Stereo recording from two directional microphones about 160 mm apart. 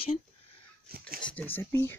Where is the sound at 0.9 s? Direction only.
70° right (ahead or behind).